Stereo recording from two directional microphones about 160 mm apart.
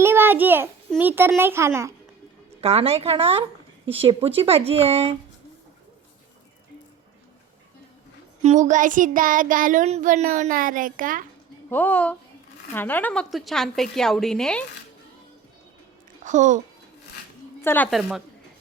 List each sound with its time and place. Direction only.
0.0 s a sound: 15° right (ahead or behind)
0.9 s a child's voice: 10° right (ahead or behind)
2.6 s speech: 40° right (ahead or behind)
8.4 s child singing: 45° right (ahead or behind)
11.7 s a woman's voice: 10° left (ahead or behind)
16.2 s speech: 50° right (ahead or behind)
17.6 s a woman's voice: 15° left (ahead or behind)